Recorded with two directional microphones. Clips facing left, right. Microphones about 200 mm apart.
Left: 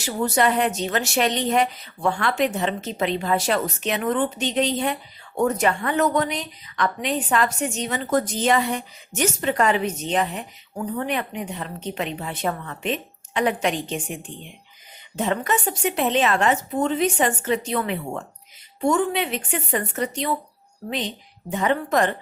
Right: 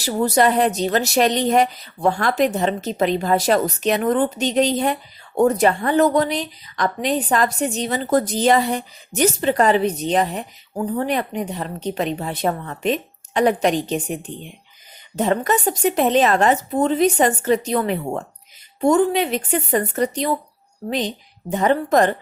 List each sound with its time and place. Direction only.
0.0 s a woman's voice: 35° right (ahead or behind)
21.5 s a woman's voice: 40° right (ahead or behind)